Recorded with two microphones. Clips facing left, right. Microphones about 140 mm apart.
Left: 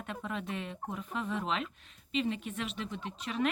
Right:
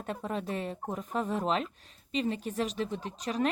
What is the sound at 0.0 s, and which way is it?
Speech, 40° right (ahead or behind).